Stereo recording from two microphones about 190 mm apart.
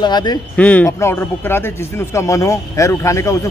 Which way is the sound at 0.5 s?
5° left (ahead or behind).